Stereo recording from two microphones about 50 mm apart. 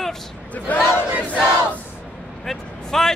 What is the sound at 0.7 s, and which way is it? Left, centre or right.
Speech, left.